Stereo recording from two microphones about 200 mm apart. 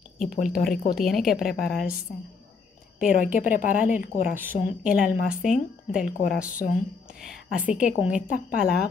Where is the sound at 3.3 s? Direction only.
40° left (ahead or behind).